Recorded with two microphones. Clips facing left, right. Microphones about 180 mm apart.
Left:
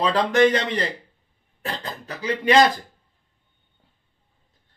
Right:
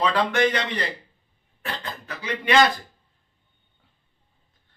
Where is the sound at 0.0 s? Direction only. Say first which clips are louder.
Left 4 dB; 35° left (ahead or behind).